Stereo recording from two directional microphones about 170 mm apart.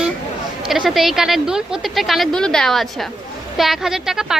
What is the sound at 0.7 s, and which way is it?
Speech, centre (ahead or behind).